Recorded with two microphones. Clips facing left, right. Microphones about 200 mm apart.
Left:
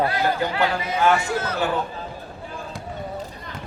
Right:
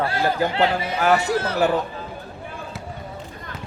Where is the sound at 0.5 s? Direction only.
25° right (ahead or behind).